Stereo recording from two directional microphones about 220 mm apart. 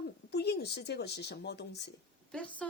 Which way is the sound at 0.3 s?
50° left (ahead or behind).